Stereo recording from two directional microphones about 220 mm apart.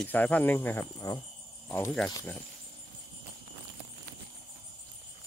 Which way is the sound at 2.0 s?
15° left (ahead or behind).